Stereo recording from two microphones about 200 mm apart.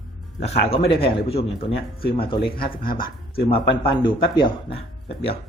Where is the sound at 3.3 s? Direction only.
25° left (ahead or behind).